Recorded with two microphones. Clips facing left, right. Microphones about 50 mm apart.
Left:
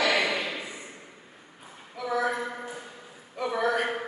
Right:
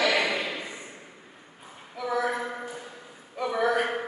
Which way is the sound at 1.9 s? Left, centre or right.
Centre.